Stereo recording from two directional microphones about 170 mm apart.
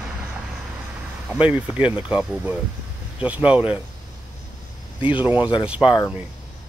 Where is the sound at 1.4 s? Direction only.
10° right (ahead or behind).